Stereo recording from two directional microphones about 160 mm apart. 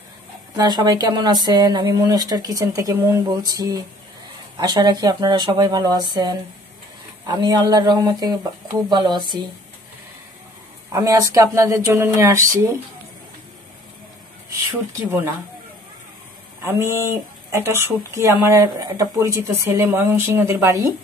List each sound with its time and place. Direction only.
0.6 s speech: 25° right (ahead or behind)
10.9 s speech: 20° right (ahead or behind)
16.6 s speech: 15° right (ahead or behind)